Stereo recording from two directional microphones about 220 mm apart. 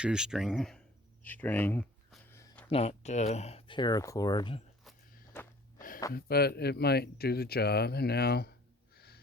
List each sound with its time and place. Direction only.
0.0 s speech: 5° right (ahead or behind)
2.3 s a sound: 10° left (ahead or behind)
2.6 s speech: 30° left (ahead or behind)
5.3 s wheeze: 10° left (ahead or behind)
6.1 s speech: 45° left (ahead or behind)
9.0 s snort: 45° left (ahead or behind)